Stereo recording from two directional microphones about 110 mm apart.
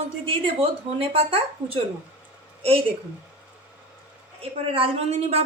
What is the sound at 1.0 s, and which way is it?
Speech, 60° right (ahead or behind).